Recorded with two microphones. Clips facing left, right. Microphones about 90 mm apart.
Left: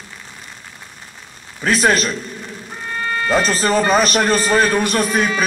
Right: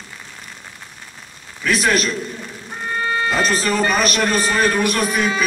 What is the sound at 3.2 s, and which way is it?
A man's voice, 40° left (ahead or behind).